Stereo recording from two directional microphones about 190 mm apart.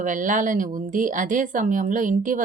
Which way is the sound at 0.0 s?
45° right (ahead or behind).